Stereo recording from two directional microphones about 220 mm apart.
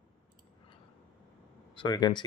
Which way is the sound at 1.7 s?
20° left (ahead or behind).